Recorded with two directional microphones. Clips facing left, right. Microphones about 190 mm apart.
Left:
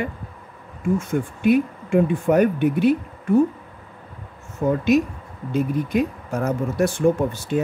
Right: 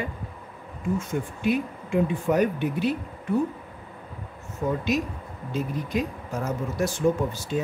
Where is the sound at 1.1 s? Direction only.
55° left (ahead or behind).